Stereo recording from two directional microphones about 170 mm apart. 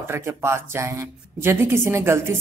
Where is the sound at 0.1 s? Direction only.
15° right (ahead or behind).